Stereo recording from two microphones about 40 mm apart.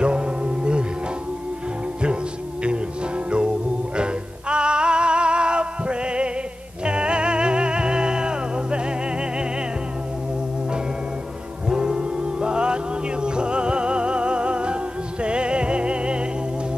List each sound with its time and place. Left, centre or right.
0.0 s music: right
3.9 s music: right
11.7 s music: centre